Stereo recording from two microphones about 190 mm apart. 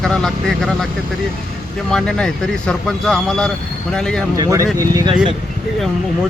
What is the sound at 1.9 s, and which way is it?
Speech, 5° left (ahead or behind).